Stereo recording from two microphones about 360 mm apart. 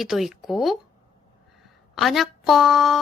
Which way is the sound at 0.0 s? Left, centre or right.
Centre.